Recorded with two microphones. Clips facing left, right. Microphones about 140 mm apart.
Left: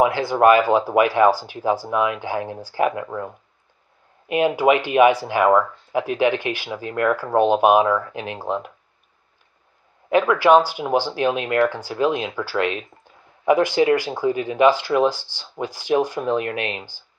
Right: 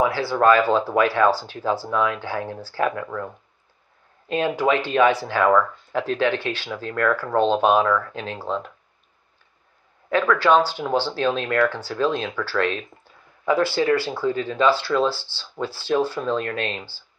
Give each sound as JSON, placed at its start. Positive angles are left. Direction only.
{"t": 0.0, "sound": "speech", "side_deg": 20}
{"t": 4.3, "sound": "speech", "side_deg": 15}
{"t": 10.0, "sound": "speech", "side_deg": 15}